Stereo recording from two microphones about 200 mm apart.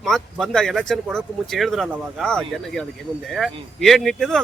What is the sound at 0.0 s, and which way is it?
Speech, centre (ahead or behind).